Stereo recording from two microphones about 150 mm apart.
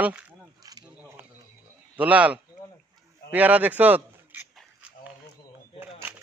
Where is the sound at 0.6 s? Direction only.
25° right (ahead or behind).